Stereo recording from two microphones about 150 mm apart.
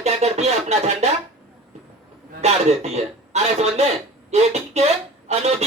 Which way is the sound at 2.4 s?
45° right (ahead or behind).